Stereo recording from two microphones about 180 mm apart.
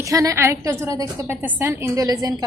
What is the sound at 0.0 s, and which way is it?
A woman's voice, 20° right (ahead or behind).